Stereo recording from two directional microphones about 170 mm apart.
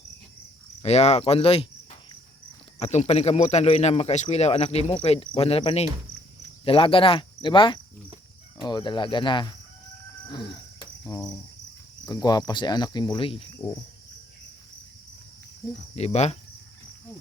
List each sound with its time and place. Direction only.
0.8 s cricket: 40° left (ahead or behind)
2.7 s speech: 40° left (ahead or behind)
8.6 s cricket: 25° left (ahead or behind)
10.2 s a sound: 25° left (ahead or behind)
11.1 s cricket: 25° left (ahead or behind)
16.0 s speech: 40° left (ahead or behind)